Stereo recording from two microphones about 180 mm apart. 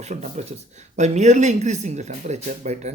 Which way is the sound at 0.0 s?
40° right (ahead or behind).